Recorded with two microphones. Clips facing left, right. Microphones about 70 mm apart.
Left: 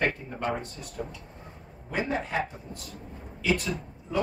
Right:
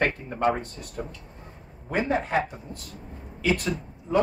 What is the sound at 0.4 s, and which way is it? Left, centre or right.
Speech, right.